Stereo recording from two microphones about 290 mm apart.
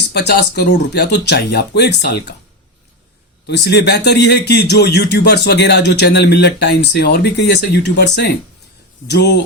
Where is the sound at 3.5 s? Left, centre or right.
Left.